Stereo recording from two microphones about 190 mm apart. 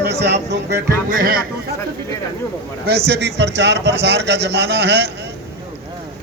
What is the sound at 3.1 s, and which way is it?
A man's voice, 65° right (ahead or behind).